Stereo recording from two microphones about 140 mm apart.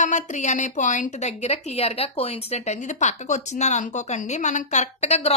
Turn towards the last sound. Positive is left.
turn(degrees=50)  # may be behind; listen again after turning